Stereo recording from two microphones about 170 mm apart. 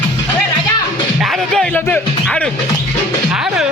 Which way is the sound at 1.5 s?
5° left (ahead or behind).